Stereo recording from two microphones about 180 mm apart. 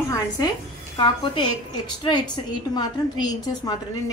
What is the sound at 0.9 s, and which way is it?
Speech, 25° left (ahead or behind).